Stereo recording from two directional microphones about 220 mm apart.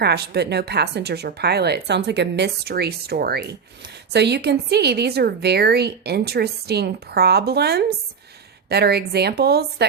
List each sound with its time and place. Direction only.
0.0 s a woman's voice: 50° right (ahead or behind)